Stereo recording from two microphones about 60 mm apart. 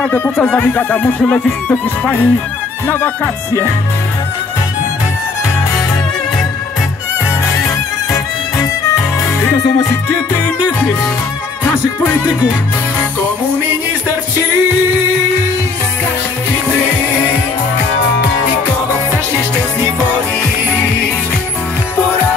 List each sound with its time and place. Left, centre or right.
0.0 s music: left